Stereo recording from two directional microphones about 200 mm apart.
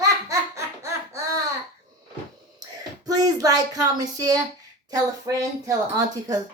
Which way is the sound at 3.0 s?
20° right (ahead or behind).